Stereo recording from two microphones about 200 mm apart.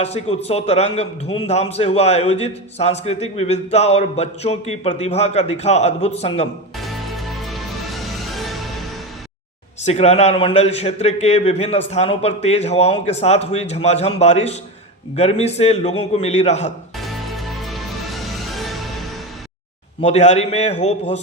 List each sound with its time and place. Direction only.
0.0 s speech: 30° left (ahead or behind)
6.7 s music: centre (ahead or behind)
9.8 s speech: 35° left (ahead or behind)
17.0 s music: centre (ahead or behind)
20.0 s speech: 35° left (ahead or behind)